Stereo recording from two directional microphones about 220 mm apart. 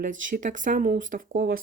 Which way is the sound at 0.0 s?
35° right (ahead or behind).